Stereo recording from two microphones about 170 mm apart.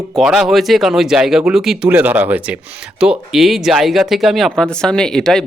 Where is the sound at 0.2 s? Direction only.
Centre (ahead or behind).